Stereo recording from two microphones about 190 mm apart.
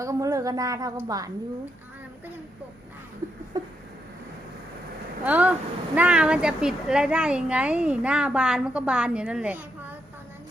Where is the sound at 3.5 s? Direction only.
20° right (ahead or behind).